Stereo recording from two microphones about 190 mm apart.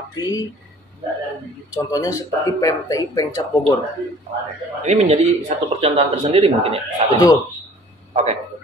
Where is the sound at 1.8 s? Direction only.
20° left (ahead or behind).